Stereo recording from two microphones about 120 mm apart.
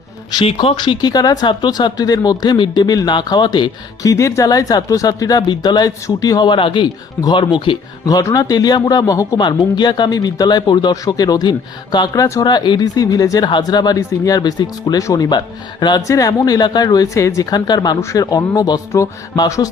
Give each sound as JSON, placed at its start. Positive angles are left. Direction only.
{"t": 0.4, "sound": "speech", "side_deg": 45}
{"t": 4.1, "sound": "speech", "side_deg": 25}
{"t": 9.4, "sound": "speech", "side_deg": 40}